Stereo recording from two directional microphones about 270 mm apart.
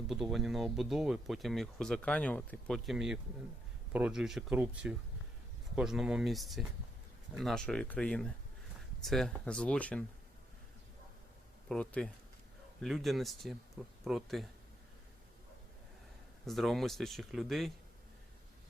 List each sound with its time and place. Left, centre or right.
0.1 s speech: centre
11.7 s speech: centre
16.5 s speech: centre